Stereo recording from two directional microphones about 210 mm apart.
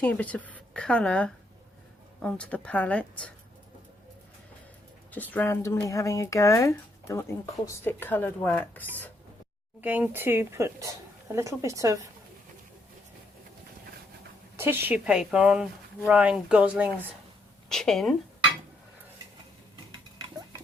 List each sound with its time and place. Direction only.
0.0 s a woman's voice: 5° left (ahead or behind)
5.1 s speech: 10° left (ahead or behind)
9.8 s speech: 10° right (ahead or behind)
14.5 s a woman's voice: 10° right (ahead or behind)